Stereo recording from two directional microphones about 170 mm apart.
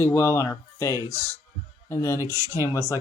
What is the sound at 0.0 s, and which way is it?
Speech, 15° left (ahead or behind).